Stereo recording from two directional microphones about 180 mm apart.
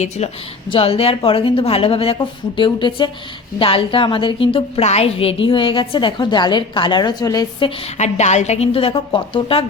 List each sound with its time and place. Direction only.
0.2 s a woman's voice: 35° left (ahead or behind); by 7.7 s 20° left (ahead or behind)
7.9 s a woman's voice: 40° left (ahead or behind)